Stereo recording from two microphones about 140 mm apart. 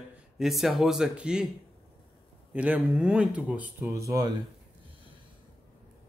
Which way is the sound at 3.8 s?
20° right (ahead or behind).